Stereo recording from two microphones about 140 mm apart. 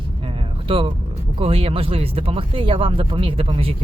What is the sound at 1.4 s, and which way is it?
Speech, 40° right (ahead or behind).